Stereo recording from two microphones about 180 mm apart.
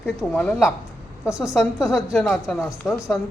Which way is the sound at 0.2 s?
Centre (ahead or behind).